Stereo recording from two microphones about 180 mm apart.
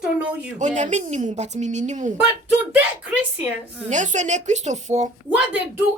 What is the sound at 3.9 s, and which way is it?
A woman's voice, 40° right (ahead or behind).